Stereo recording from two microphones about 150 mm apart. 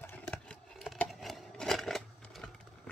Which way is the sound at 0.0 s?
10° left (ahead or behind).